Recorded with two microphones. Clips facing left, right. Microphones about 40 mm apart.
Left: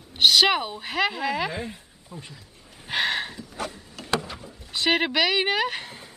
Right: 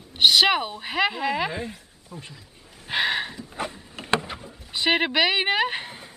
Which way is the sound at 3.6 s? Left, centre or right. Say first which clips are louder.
Right 2 dB; right.